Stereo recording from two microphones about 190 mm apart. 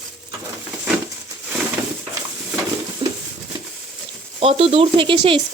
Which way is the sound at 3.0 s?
25° right (ahead or behind).